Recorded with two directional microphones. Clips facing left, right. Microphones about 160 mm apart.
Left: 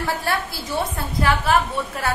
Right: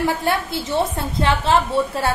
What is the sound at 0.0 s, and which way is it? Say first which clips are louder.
A woman's voice: right 4 dB; 20° right (ahead or behind).